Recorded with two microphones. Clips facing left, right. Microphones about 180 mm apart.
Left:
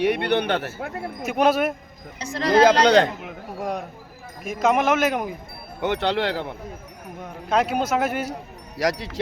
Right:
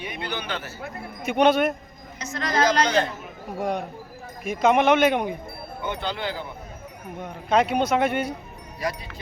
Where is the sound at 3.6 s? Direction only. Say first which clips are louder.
Right 2 dB; centre (ahead or behind).